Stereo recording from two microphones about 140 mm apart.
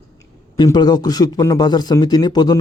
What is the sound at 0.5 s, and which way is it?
A man's voice, 30° left (ahead or behind).